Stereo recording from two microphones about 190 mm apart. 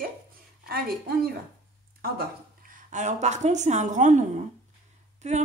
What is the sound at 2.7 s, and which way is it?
Speech, 40° right (ahead or behind).